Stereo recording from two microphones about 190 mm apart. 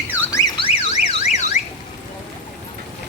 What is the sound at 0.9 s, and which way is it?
Car alarm, 35° left (ahead or behind).